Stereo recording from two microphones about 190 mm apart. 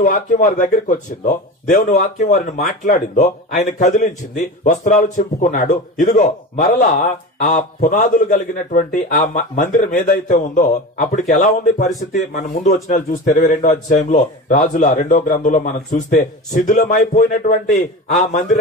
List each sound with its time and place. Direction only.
0.0 s a man's voice: 45° left (ahead or behind)